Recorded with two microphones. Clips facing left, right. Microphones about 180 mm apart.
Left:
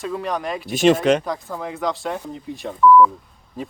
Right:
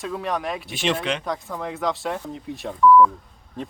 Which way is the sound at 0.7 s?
45° left (ahead or behind).